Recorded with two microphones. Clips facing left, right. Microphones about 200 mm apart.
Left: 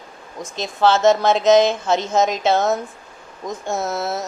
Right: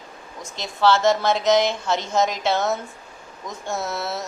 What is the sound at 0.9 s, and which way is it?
A woman's voice, 20° left (ahead or behind).